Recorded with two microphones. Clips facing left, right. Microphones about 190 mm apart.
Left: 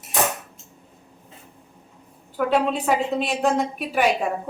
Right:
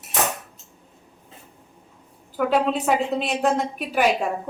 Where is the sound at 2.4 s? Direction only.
Centre (ahead or behind).